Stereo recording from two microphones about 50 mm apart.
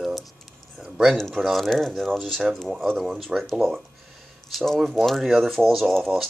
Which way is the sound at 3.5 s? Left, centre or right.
Centre.